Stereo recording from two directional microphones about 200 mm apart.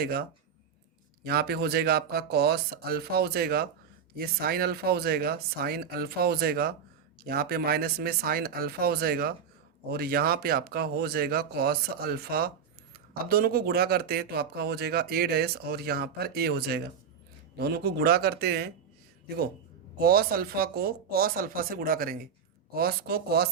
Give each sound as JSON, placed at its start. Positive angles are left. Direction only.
{"t": 0.0, "sound": "speech", "side_deg": -50}
{"t": 20.0, "sound": "speech", "side_deg": -50}